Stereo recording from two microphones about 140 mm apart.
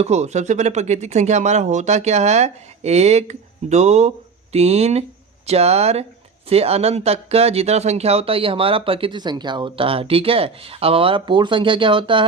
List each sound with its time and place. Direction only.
0.0 s speech: 55° right (ahead or behind); by 12.2 s 35° right (ahead or behind)